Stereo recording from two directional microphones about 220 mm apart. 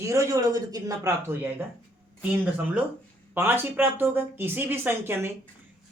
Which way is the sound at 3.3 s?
10° right (ahead or behind).